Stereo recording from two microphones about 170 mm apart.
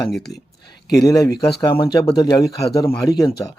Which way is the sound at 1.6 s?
30° left (ahead or behind).